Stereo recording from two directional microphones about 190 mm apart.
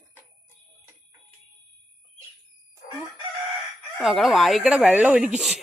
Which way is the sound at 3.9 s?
Centre (ahead or behind).